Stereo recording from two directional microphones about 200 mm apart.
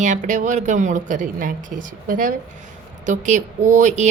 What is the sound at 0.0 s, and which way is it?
A woman's voice, 40° right (ahead or behind).